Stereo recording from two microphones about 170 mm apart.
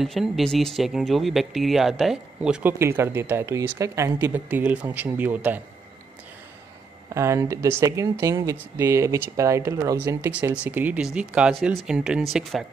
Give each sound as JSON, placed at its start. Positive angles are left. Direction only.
{"t": 0.0, "sound": "speech", "side_deg": 0}
{"t": 2.8, "sound": "a woman's voice", "side_deg": -15}
{"t": 7.2, "sound": "a woman's voice", "side_deg": -15}